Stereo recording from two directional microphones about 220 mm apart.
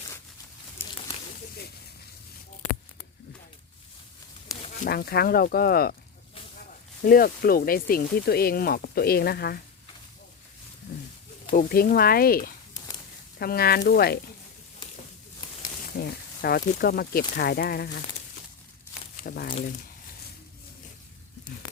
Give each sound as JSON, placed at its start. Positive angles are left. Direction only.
{"t": 0.8, "sound": "a sound", "side_deg": 10}
{"t": 4.9, "sound": "speech", "side_deg": 45}
{"t": 7.0, "sound": "speech", "side_deg": 40}
{"t": 11.5, "sound": "speech", "side_deg": 40}
{"t": 15.9, "sound": "speech", "side_deg": 45}
{"t": 19.2, "sound": "speech", "side_deg": 40}